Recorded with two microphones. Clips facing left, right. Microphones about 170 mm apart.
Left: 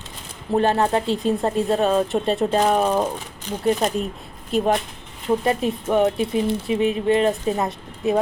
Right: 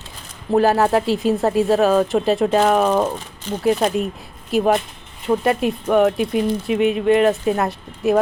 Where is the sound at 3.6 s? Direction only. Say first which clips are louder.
Right 3 dB; 5° right (ahead or behind).